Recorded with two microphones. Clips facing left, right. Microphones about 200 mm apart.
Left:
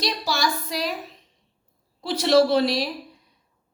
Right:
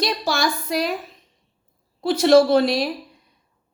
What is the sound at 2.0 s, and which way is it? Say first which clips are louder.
Speech: right 4 dB; 50° right (ahead or behind).